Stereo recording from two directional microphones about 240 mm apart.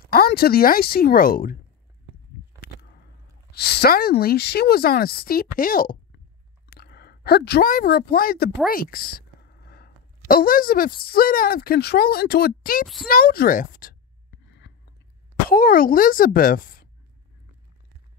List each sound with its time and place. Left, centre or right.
0.1 s a woman's voice: left
3.5 s a woman's voice: left
9.7 s a sound: left
11.1 s a woman's voice: left
12.8 s speech: centre
13.1 s a woman's voice: left
14.7 s chewing: left
15.5 s a woman's voice: left